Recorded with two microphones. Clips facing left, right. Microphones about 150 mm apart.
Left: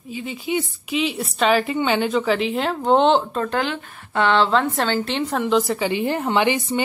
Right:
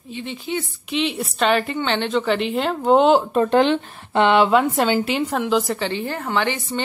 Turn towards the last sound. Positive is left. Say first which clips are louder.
# left 3 dB
turn(degrees=15)  # may be behind; listen again after turning